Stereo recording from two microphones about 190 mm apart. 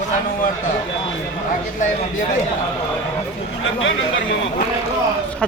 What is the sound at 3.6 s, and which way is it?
Speech, 90° left.